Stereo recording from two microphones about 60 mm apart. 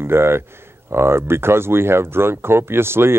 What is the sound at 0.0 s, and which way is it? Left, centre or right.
Speech, right.